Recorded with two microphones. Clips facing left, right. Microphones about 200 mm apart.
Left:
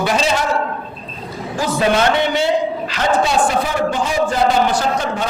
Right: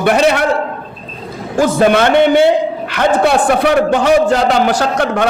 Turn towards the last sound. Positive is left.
turn(degrees=-80)